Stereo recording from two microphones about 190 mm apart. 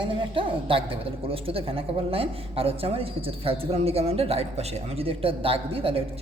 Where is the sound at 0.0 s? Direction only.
30° right (ahead or behind).